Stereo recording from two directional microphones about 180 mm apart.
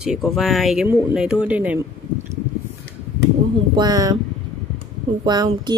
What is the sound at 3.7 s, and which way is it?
Speech, 20° right (ahead or behind).